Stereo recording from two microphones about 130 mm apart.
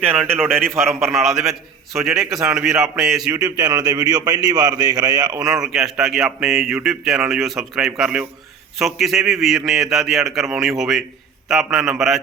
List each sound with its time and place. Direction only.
1.0 s speech: centre (ahead or behind)
3.3 s a man's voice: 30° right (ahead or behind)
5.5 s speech: 5° right (ahead or behind)